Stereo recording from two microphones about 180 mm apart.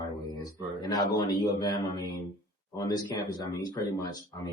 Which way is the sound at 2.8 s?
20° left (ahead or behind).